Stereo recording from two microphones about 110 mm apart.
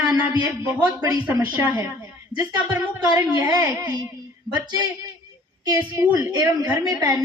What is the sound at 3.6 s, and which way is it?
Speech, 20° right (ahead or behind).